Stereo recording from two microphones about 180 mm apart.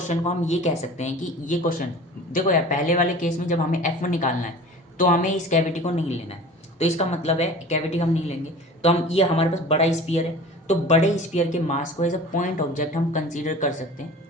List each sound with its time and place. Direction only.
0.1 s speech: 40° left (ahead or behind)